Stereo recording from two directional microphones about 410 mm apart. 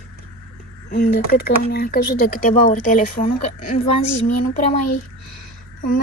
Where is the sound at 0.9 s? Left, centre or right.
Left.